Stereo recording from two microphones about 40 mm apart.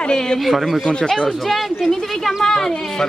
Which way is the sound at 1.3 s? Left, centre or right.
Centre.